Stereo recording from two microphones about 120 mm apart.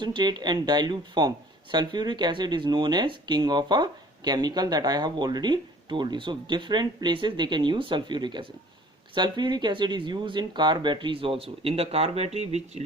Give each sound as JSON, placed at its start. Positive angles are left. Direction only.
{"t": 0.0, "sound": "speech", "side_deg": -40}